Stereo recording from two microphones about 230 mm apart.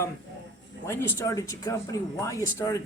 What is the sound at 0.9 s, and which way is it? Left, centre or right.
Speech, centre.